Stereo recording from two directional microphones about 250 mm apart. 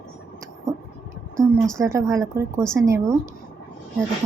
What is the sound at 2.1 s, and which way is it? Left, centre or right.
A woman's voice, centre.